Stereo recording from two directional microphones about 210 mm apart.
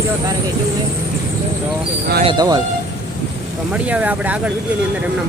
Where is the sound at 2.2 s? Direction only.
20° right (ahead or behind).